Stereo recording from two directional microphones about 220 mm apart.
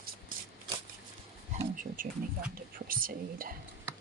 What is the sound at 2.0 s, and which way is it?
Speech, 40° right (ahead or behind).